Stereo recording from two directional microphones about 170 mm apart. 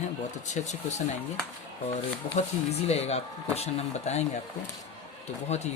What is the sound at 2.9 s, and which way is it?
Speech, 40° left (ahead or behind).